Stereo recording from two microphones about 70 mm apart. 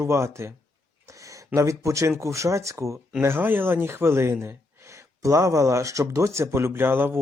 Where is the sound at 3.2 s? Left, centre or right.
Right.